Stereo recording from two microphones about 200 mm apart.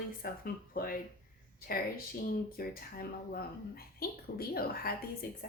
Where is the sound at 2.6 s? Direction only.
50° left (ahead or behind).